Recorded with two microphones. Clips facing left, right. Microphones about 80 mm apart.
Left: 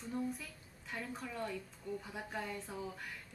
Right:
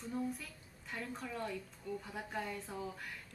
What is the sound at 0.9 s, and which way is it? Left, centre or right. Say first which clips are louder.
A woman's voice: even; centre.